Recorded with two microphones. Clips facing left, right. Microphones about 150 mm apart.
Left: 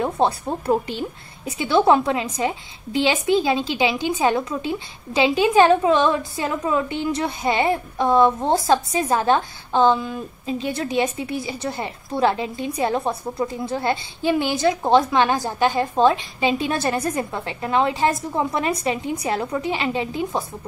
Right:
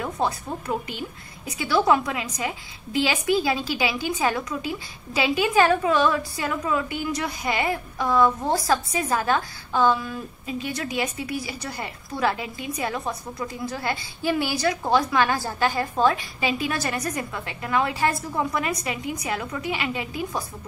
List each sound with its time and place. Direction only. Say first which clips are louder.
0.0 s a woman's voice: left 6 dB; 30° left (ahead or behind)